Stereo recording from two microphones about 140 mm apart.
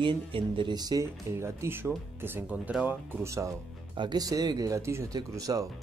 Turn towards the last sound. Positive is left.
turn(degrees=-25)  # may be behind; listen again after turning